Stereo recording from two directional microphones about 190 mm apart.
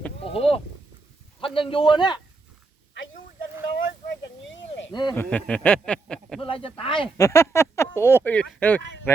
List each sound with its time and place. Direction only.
0.3 s a man's voice: 30° left (ahead or behind)
3.8 s a sound: 75° left (ahead or behind)
4.9 s speech: 25° left (ahead or behind)
5.1 s speech: 10° left (ahead or behind)
6.4 s a man's voice: 30° left (ahead or behind)
7.2 s speech: 15° left (ahead or behind)